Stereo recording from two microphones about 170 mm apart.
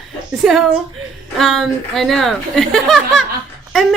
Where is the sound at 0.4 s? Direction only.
5° right (ahead or behind).